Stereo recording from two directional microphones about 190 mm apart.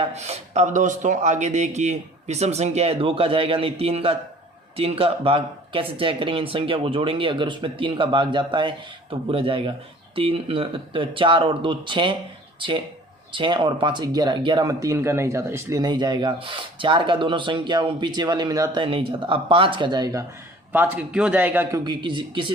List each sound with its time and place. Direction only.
0.0 s speech: 35° right (ahead or behind)
20.7 s a man's voice: 10° right (ahead or behind)
21.8 s speech: 25° right (ahead or behind)